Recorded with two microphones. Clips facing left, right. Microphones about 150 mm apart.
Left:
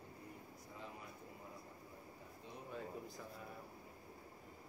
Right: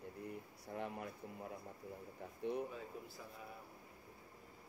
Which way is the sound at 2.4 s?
65° right (ahead or behind).